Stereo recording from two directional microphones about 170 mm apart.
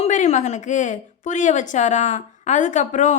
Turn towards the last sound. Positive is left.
turn(degrees=45)  # may be behind; listen again after turning